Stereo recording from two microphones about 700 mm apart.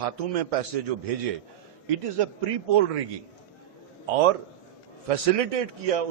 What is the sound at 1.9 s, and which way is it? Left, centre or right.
Speech, right.